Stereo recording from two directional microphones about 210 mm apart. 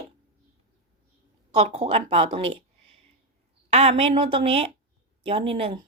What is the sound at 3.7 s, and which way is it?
A woman's voice, 30° right (ahead or behind).